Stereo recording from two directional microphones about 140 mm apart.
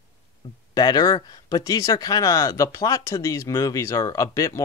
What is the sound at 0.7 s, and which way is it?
Speech, 30° left (ahead or behind).